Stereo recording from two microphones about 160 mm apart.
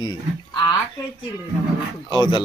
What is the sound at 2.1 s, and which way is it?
Speech, 30° left (ahead or behind).